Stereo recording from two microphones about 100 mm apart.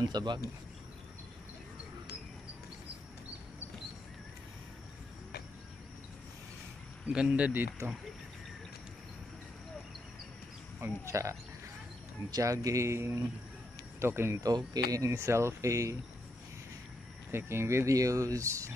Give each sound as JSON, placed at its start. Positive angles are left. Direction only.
{"t": 0.0, "sound": "speech", "side_deg": -45}
{"t": 7.1, "sound": "speech", "side_deg": -10}
{"t": 11.1, "sound": "speech", "side_deg": -30}
{"t": 14.4, "sound": "speech", "side_deg": -40}
{"t": 17.3, "sound": "speech", "side_deg": -25}